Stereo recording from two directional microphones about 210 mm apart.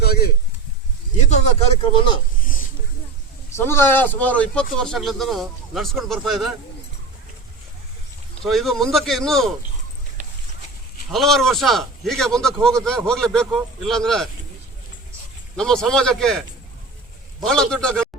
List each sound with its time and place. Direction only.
0.0 s a sound: 50° left (ahead or behind)
1.1 s speech: 35° left (ahead or behind)
3.5 s speech: 10° left (ahead or behind)
8.4 s speech: centre (ahead or behind)
11.1 s speech: centre (ahead or behind)
15.5 s speech: 5° left (ahead or behind)
17.4 s speech: 5° left (ahead or behind)